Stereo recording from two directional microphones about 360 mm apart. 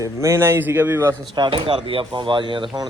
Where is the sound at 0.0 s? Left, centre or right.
Centre.